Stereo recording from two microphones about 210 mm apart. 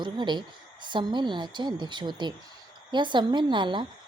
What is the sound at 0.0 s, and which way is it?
A woman's voice, 20° right (ahead or behind).